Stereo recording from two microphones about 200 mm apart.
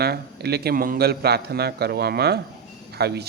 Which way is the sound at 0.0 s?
55° right (ahead or behind).